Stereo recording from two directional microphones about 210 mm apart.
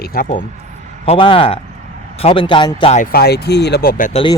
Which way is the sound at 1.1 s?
25° left (ahead or behind).